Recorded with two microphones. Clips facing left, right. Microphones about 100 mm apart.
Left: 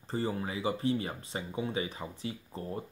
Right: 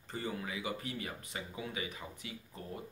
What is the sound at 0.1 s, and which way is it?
Speech, 35° left (ahead or behind).